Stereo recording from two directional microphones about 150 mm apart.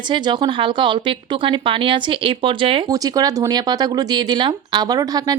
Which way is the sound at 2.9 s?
25° right (ahead or behind).